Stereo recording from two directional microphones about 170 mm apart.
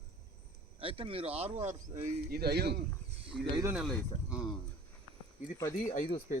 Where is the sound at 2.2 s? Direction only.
65° right (ahead or behind).